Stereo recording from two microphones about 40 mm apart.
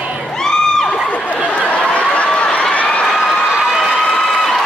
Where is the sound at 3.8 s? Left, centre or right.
Centre.